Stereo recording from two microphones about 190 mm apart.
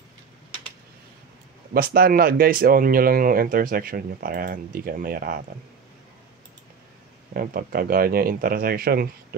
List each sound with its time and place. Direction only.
1.7 s speech: 50° right (ahead or behind)
7.3 s speech: 50° right (ahead or behind)